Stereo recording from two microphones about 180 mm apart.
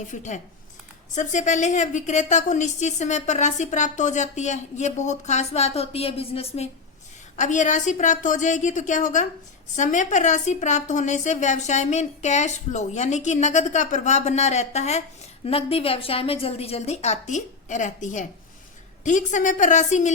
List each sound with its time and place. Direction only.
0.1 s a woman's voice: 40° left (ahead or behind)